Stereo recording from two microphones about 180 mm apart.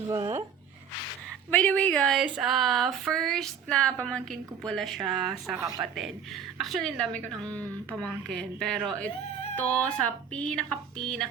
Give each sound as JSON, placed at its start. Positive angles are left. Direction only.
{"t": 0.1, "sound": "speech", "side_deg": -25}
{"t": 1.5, "sound": "speech", "side_deg": 5}